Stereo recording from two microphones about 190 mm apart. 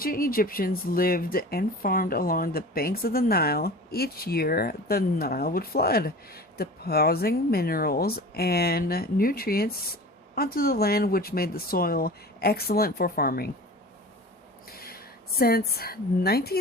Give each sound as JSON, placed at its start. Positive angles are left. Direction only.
{"t": 0.0, "sound": "speech", "side_deg": 50}
{"t": 14.8, "sound": "speech", "side_deg": 50}